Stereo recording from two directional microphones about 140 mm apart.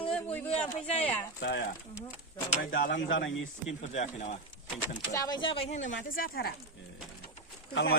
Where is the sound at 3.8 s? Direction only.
60° left (ahead or behind).